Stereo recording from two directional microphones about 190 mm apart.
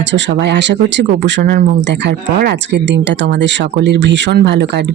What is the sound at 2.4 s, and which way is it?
Speech, 60° right (ahead or behind).